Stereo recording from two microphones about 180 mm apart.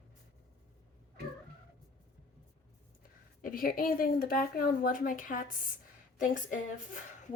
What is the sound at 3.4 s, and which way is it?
A woman's voice, 50° left (ahead or behind).